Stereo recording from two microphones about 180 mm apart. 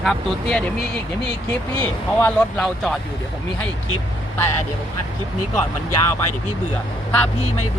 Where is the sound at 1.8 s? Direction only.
10° left (ahead or behind).